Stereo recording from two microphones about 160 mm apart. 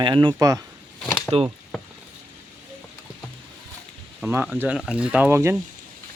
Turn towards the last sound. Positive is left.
turn(degrees=-15)  # may be behind; listen again after turning